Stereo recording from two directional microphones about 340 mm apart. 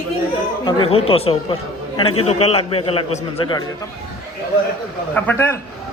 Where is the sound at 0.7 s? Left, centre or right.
Centre.